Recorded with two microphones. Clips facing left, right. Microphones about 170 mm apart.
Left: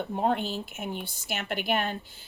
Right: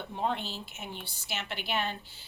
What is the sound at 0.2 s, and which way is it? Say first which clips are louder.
A woman's voice: left 5 dB; 50° left (ahead or behind).